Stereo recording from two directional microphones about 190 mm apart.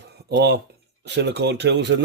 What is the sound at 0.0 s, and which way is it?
Dishes, 60° right (ahead or behind).